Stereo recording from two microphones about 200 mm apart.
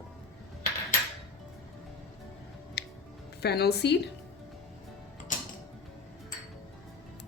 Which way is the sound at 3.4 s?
55° left (ahead or behind).